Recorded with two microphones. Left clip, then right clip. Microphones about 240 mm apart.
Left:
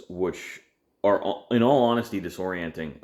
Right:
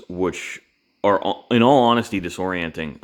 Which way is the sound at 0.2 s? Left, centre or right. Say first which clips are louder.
Right 5 dB; right.